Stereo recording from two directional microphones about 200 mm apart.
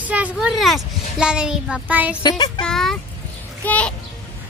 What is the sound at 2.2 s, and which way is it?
Speech, 25° left (ahead or behind).